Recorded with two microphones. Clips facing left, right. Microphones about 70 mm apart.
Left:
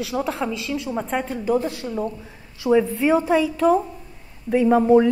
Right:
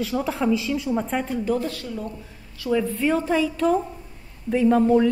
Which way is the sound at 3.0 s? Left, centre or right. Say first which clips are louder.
Left 3 dB; centre.